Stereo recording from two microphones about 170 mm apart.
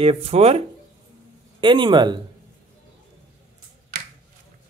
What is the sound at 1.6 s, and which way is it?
Speech, 30° right (ahead or behind).